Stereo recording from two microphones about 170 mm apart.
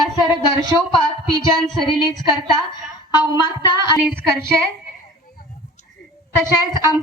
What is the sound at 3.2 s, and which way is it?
Speech, 25° left (ahead or behind).